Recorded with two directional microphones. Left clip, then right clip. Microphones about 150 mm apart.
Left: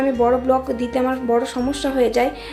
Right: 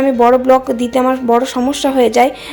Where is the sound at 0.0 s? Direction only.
35° right (ahead or behind).